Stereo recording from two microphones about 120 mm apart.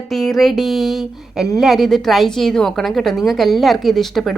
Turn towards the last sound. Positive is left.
turn(degrees=0)  # may be behind; listen again after turning